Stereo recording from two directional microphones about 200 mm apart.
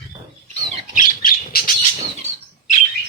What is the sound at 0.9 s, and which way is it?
Squawk, 45° left (ahead or behind).